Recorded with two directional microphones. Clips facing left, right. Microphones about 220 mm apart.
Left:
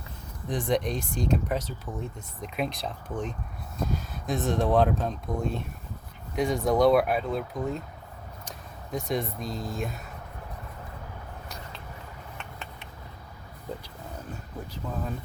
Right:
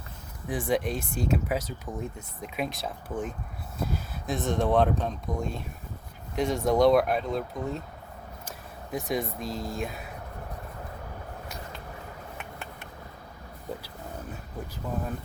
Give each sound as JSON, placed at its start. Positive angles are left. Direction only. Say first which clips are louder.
{"t": 0.4, "sound": "speech", "louder": "even", "side_deg": -5}
{"t": 8.9, "sound": "speech", "louder": "even", "side_deg": 0}